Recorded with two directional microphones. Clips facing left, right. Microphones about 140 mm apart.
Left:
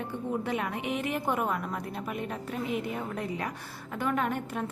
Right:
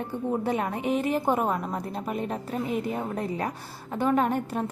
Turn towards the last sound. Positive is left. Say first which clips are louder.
# right 6 dB
turn(degrees=-35)  # may be behind; listen again after turning